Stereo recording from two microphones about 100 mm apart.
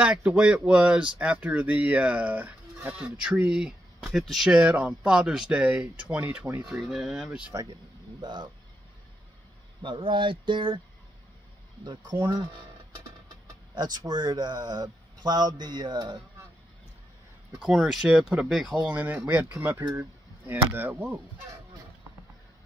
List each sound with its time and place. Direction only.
0.0 s speech: 10° right (ahead or behind)
6.6 s speech: 5° right (ahead or behind)
8.2 s a man's voice: 45° right (ahead or behind)
9.8 s speech: 60° right (ahead or behind)
11.8 s a man's voice: 50° right (ahead or behind)
13.7 s a man's voice: 45° right (ahead or behind)
17.6 s speech: 5° right (ahead or behind)